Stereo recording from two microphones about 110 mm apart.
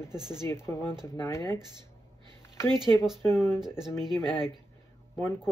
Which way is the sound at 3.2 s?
25° left (ahead or behind).